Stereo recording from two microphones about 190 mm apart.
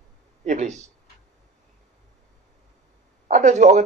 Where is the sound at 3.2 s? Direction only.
40° right (ahead or behind).